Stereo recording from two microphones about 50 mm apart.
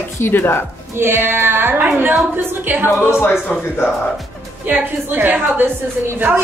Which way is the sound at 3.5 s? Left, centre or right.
Left.